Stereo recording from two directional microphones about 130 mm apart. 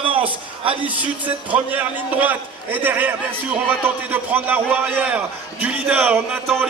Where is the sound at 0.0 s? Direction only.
45° right (ahead or behind).